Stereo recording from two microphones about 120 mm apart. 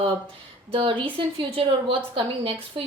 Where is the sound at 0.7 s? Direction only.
50° right (ahead or behind).